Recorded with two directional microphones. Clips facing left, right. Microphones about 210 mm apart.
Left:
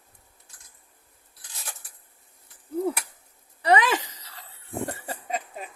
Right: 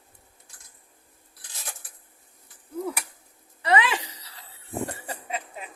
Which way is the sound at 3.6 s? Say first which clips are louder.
Left 2 dB; 40° left (ahead or behind).